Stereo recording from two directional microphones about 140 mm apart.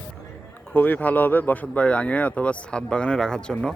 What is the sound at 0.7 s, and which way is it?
Speech, 15° left (ahead or behind).